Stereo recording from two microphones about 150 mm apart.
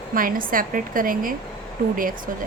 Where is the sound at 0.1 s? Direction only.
70° right (ahead or behind).